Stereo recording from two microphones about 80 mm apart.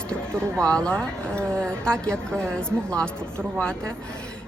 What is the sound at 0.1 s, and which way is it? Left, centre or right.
Speech, centre.